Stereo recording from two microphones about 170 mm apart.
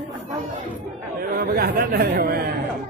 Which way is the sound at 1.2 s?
60° right (ahead or behind).